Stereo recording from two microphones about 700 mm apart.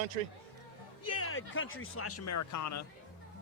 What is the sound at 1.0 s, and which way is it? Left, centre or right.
Speech, centre.